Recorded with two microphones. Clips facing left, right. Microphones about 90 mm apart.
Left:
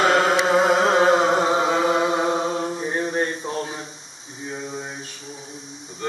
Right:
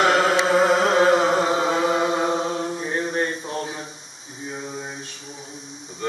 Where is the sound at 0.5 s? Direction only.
20° left (ahead or behind).